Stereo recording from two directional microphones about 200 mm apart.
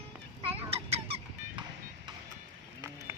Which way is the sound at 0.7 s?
30° right (ahead or behind).